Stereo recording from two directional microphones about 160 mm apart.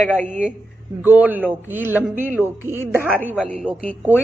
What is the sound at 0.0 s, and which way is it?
Speech, 10° left (ahead or behind).